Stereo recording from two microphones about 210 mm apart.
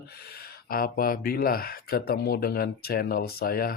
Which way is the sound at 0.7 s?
45° left (ahead or behind).